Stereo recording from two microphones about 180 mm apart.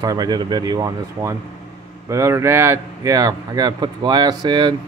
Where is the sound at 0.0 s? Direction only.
20° right (ahead or behind).